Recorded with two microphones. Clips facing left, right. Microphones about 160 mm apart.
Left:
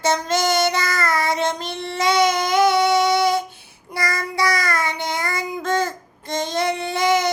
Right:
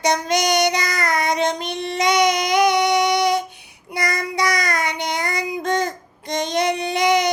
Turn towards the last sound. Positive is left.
turn(degrees=-20)  # may be behind; listen again after turning